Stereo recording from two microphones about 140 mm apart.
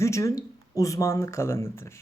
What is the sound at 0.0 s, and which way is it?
Speech, 20° left (ahead or behind).